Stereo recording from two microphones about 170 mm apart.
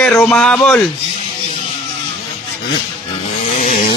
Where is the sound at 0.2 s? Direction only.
5° left (ahead or behind).